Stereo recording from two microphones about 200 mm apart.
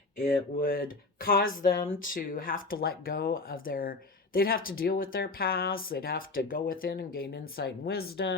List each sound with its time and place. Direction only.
0.2 s speech: 45° left (ahead or behind)